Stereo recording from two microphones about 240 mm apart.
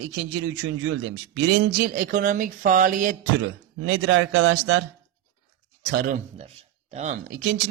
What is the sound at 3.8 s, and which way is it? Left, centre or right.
Speech, right.